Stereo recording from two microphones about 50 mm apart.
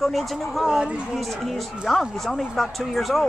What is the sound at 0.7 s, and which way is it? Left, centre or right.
Speech, centre.